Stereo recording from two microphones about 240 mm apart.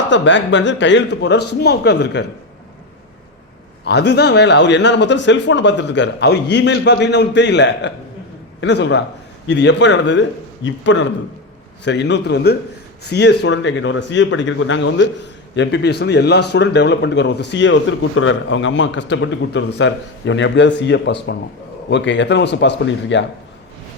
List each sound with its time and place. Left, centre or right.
0.1 s speech: left
3.8 s speech: left